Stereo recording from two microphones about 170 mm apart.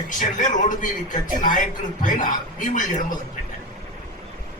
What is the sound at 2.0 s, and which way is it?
A man's voice, 50° left (ahead or behind).